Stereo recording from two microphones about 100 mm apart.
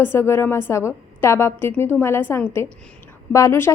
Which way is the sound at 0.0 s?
25° left (ahead or behind).